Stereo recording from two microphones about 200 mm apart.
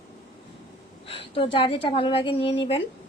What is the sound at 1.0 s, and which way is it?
A woman's voice, 25° left (ahead or behind).